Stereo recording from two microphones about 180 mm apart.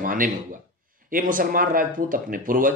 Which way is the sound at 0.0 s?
50° right (ahead or behind).